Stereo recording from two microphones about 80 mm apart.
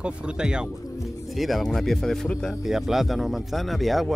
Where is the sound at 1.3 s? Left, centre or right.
Centre.